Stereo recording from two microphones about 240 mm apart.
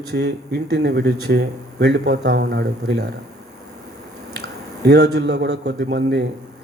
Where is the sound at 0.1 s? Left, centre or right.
Right.